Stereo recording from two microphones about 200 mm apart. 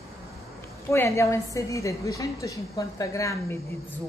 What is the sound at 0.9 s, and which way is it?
A woman's voice, 15° left (ahead or behind).